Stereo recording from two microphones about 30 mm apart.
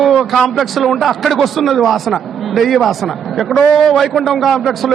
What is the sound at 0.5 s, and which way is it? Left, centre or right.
A man's voice, centre.